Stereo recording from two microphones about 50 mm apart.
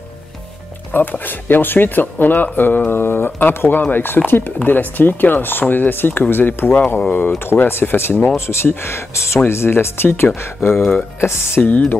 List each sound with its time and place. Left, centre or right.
0.9 s speech: left
2.9 s speech: left
3.3 s speech: left
8.6 s speech: left
11.6 s speech: left